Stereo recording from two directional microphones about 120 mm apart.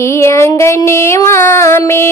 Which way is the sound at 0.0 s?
20° left (ahead or behind).